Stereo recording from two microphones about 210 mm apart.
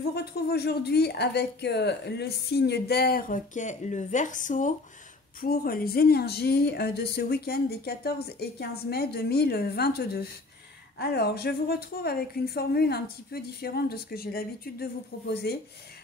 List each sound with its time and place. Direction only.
0.1 s a woman's voice: 50° left (ahead or behind)